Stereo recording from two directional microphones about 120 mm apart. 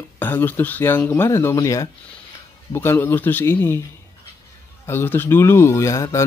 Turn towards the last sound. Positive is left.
turn(degrees=25)  # may be behind; listen again after turning